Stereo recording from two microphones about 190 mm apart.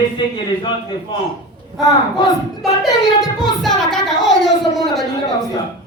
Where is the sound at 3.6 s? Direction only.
Centre (ahead or behind).